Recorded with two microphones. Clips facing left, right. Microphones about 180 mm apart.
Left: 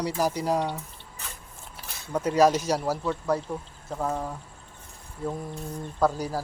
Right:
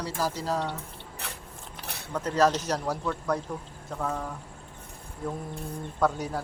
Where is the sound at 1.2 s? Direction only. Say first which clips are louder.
Right 2 dB; 65° right (ahead or behind).